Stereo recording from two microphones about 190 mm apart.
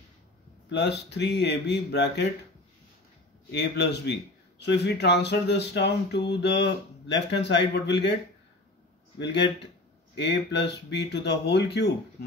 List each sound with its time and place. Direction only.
0.7 s speech: 65° left (ahead or behind)
3.5 s speech: 60° left (ahead or behind)
9.2 s speech: 65° left (ahead or behind)